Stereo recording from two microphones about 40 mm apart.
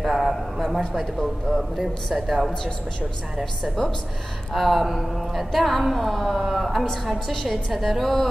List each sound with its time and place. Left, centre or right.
0.0 s a sound: centre
0.6 s speech: centre
2.2 s a woman's voice: centre
4.6 s a woman's voice: centre